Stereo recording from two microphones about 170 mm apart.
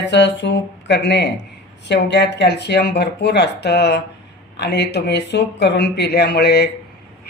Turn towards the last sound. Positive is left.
turn(degrees=70)  # may be behind; listen again after turning